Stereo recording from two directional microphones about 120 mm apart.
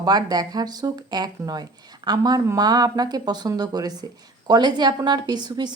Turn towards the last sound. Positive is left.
turn(degrees=-35)  # may be behind; listen again after turning